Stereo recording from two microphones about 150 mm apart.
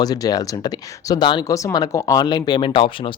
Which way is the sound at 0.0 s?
25° left (ahead or behind).